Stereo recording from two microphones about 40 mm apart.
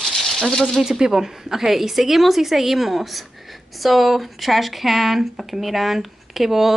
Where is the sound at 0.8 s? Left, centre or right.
Centre.